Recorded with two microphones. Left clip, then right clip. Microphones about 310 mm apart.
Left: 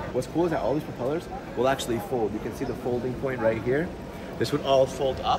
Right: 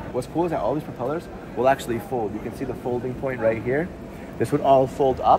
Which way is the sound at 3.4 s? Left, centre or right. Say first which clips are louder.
Right 3 dB; centre.